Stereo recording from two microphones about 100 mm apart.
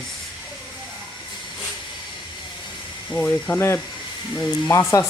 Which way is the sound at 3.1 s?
15° left (ahead or behind).